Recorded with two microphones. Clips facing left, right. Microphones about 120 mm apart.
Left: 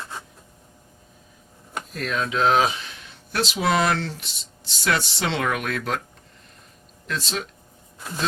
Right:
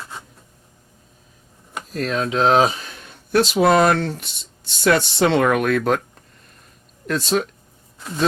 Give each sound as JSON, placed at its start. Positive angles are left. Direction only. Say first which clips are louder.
{"t": 1.9, "sound": "speech", "louder": "right 5 dB", "side_deg": -35}
{"t": 7.1, "sound": "speech", "louder": "right 9 dB", "side_deg": -50}